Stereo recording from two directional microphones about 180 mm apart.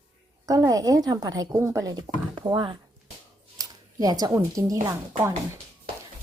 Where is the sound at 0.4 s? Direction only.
20° right (ahead or behind).